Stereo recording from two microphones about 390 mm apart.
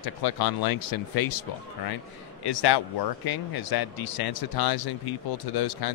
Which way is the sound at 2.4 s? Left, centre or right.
Left.